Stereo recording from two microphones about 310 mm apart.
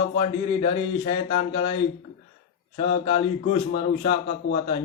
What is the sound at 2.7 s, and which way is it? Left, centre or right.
A man's voice, centre.